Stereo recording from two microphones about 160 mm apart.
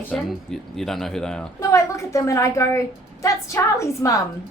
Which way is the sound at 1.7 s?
20° left (ahead or behind).